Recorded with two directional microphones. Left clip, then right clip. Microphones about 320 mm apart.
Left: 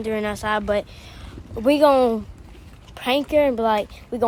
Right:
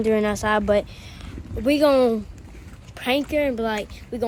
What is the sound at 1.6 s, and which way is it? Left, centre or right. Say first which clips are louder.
Speech: left 2 dB; centre.